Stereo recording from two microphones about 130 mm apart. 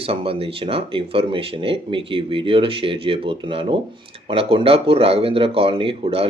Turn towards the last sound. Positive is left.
turn(degrees=-45)  # may be behind; listen again after turning